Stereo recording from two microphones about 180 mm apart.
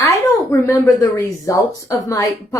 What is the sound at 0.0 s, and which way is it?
Speech, 15° left (ahead or behind).